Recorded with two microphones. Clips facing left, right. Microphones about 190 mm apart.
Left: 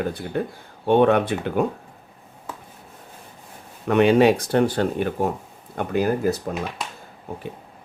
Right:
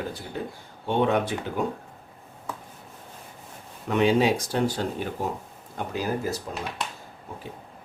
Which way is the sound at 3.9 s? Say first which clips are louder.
Left 6 dB; 60° left (ahead or behind).